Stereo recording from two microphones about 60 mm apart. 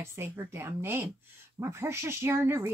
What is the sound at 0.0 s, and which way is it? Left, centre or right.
A woman's voice, right.